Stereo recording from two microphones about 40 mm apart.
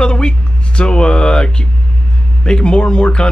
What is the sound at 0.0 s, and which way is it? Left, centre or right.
Speech, left.